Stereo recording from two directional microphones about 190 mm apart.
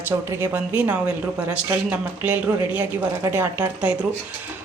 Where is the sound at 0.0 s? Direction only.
10° right (ahead or behind).